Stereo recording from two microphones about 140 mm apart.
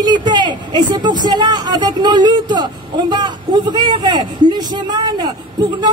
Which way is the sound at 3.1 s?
30° right (ahead or behind).